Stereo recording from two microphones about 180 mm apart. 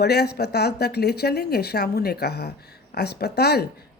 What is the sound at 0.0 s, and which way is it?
Speech, 65° left (ahead or behind).